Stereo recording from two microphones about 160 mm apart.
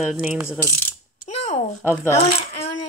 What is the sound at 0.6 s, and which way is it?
Ratchet, 15° left (ahead or behind).